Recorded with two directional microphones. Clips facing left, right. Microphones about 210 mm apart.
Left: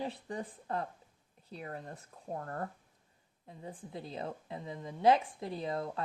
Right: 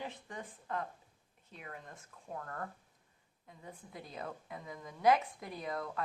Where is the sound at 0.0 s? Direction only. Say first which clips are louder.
Left 6 dB; 35° left (ahead or behind).